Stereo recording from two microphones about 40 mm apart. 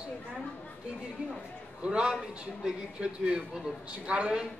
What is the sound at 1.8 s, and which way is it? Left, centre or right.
A man's voice, right.